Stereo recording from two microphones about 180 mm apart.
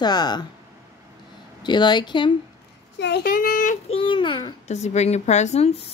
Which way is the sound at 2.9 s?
65° left (ahead or behind).